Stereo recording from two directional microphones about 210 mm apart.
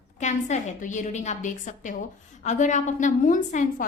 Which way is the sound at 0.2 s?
35° left (ahead or behind).